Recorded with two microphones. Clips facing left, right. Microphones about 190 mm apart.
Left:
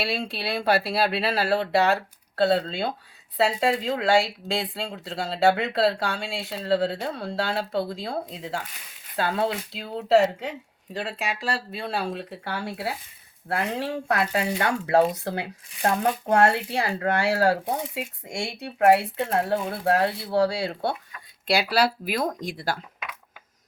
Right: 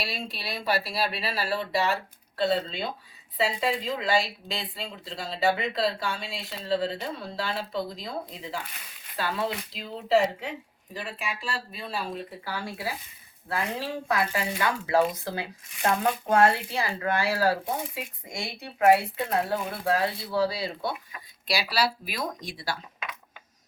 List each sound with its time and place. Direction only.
0.0 s speech: 70° left (ahead or behind)
9.7 s speech: 70° left (ahead or behind)
18.8 s speech: 55° left (ahead or behind)